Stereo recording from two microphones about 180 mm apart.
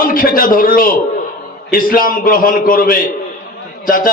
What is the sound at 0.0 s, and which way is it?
A man's voice, 50° left (ahead or behind).